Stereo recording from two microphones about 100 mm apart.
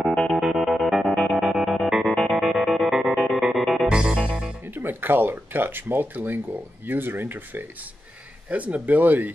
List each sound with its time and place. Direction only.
0.0 s music: 5° left (ahead or behind)
0.3 s music: 5° right (ahead or behind)
8.5 s speech: 15° right (ahead or behind)